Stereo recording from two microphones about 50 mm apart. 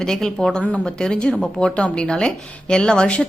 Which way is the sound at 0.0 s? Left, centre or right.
Centre.